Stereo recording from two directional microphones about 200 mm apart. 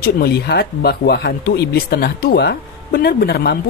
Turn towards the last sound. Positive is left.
turn(degrees=50)  # may be behind; listen again after turning